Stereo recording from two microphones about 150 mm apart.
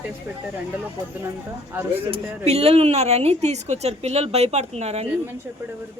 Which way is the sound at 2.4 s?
40° right (ahead or behind).